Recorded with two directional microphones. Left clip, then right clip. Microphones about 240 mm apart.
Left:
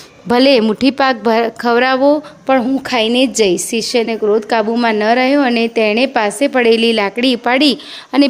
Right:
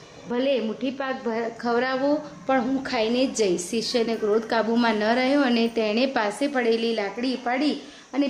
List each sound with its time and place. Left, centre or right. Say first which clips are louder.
0.3 s a woman's voice: left 14 dB; left